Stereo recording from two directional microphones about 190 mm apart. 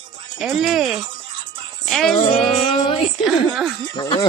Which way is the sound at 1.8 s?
Centre (ahead or behind).